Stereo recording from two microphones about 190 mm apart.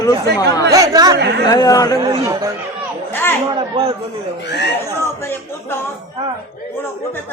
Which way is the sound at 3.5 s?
25° right (ahead or behind).